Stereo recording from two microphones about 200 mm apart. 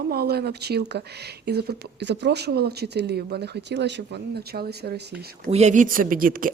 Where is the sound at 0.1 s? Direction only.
50° right (ahead or behind).